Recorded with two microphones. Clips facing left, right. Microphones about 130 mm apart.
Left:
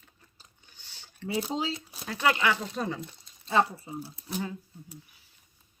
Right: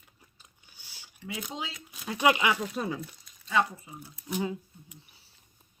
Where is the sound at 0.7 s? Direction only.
10° right (ahead or behind).